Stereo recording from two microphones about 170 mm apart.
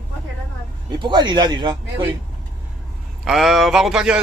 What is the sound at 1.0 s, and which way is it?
Speech, 25° right (ahead or behind).